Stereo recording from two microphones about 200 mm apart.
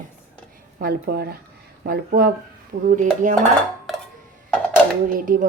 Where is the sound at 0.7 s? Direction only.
50° right (ahead or behind).